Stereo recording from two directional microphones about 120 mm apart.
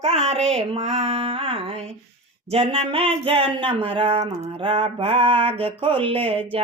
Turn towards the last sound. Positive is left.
turn(degrees=-50)  # may be behind; listen again after turning